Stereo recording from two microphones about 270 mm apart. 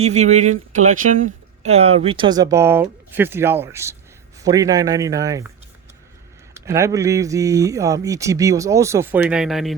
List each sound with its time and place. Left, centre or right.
0.0 s speech: right
6.5 s speech: centre